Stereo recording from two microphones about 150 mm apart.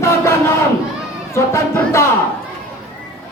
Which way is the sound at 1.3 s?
20° left (ahead or behind).